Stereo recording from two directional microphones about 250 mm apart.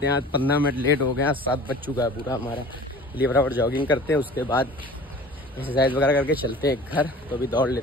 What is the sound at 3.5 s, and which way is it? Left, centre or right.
Speech, centre.